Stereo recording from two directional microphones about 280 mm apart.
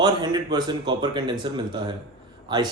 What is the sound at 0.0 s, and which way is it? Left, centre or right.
Speech, centre.